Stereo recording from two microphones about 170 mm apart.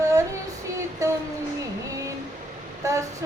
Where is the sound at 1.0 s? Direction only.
20° right (ahead or behind).